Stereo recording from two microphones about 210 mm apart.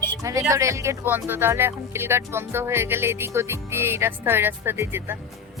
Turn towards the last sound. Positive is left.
turn(degrees=-10)  # may be behind; listen again after turning